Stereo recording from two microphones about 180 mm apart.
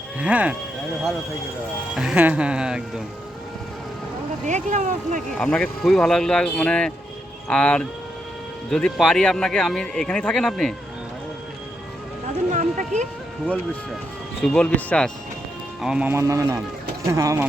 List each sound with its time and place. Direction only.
0.2 s speech: 5° right (ahead or behind)
2.0 s speech: 5° right (ahead or behind)
4.4 s speech: 40° right (ahead or behind)
5.4 s speech: 5° left (ahead or behind)
12.5 s a sound: 45° right (ahead or behind)
14.4 s speech: 5° left (ahead or behind)
15.8 s speech: 5° right (ahead or behind)